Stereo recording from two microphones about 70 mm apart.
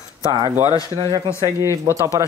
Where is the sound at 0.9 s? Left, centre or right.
Right.